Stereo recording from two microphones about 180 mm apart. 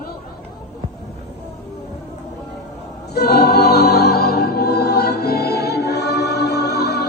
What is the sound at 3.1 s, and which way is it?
Music, 65° left (ahead or behind).